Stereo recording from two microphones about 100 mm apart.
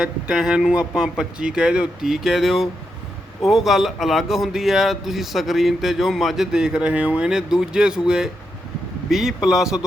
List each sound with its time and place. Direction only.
0.0 s a man's voice: 5° right (ahead or behind)